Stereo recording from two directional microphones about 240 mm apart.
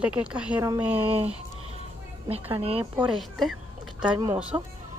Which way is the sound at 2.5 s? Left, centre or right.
Right.